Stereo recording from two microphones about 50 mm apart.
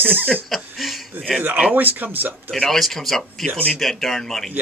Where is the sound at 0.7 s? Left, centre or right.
Centre.